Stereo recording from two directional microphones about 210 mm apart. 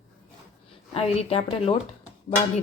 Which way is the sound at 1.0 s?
30° left (ahead or behind).